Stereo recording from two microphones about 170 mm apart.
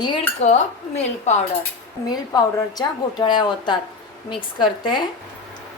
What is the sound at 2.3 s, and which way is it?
A woman's voice, 25° left (ahead or behind).